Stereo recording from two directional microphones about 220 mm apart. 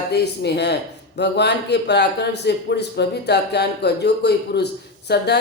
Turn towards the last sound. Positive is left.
turn(degrees=45)  # may be behind; listen again after turning